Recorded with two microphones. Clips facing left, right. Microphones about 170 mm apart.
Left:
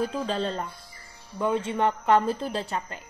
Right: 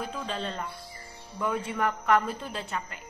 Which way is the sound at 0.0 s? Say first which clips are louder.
Left 6 dB; 35° left (ahead or behind).